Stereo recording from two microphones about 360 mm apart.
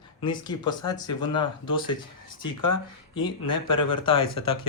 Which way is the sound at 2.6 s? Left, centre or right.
Left.